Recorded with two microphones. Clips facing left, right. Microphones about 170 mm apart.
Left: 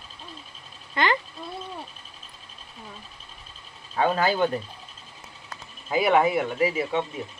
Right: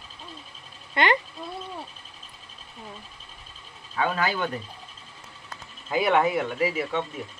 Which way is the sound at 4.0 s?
35° left (ahead or behind).